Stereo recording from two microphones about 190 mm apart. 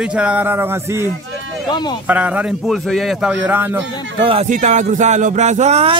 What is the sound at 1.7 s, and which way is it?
Speech, 20° left (ahead or behind).